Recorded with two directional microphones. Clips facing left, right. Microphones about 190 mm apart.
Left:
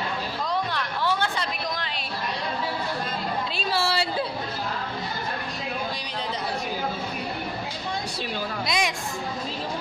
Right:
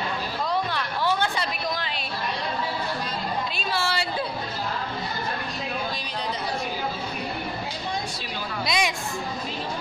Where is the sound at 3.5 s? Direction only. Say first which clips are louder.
Left 2 dB; 35° left (ahead or behind).